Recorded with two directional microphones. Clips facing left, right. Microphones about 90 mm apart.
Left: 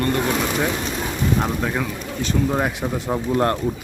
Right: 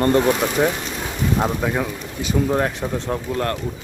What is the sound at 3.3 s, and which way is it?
Speech, 25° left (ahead or behind).